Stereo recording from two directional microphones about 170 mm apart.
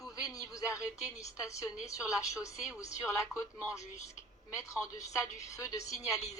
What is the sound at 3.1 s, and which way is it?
A woman's voice, 15° left (ahead or behind).